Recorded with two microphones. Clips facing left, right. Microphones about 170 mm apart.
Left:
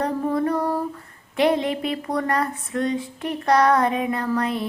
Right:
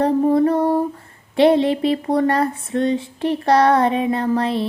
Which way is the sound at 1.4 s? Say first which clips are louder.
Right 6 dB; 30° right (ahead or behind).